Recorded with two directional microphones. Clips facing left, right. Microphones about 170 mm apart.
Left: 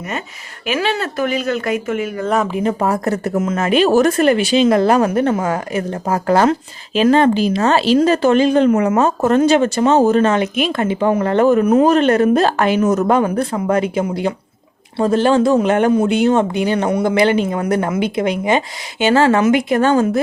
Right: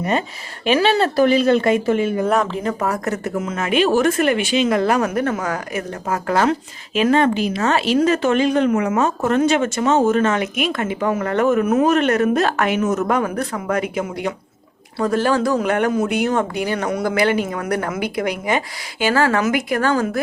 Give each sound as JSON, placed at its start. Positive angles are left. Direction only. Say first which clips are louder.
{"t": 0.7, "sound": "speech", "louder": "right 3 dB", "side_deg": -30}
{"t": 2.2, "sound": "speech", "louder": "left 4 dB", "side_deg": 0}
{"t": 2.5, "sound": "speech", "louder": "left 5 dB", "side_deg": 15}
{"t": 2.8, "sound": "speech", "louder": "left 4 dB", "side_deg": 30}